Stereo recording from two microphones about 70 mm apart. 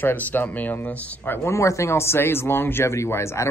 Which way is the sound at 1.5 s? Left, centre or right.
Left.